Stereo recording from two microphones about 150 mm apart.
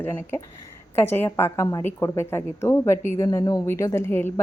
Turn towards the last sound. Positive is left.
turn(degrees=15)  # may be behind; listen again after turning